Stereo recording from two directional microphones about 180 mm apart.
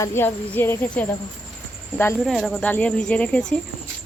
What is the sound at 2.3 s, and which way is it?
Speech, centre (ahead or behind).